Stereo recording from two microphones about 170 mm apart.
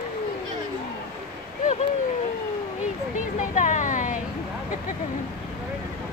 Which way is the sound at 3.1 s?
45° left (ahead or behind).